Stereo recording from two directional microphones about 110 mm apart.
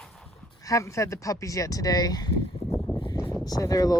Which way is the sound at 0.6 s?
30° left (ahead or behind).